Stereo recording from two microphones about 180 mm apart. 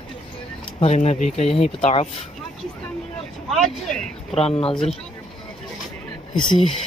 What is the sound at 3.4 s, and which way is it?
Speech, centre (ahead or behind).